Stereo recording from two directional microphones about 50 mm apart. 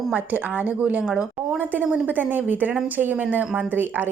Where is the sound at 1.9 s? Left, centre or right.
Right.